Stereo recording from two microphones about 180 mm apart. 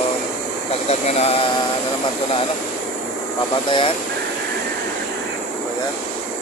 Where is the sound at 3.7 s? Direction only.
30° left (ahead or behind).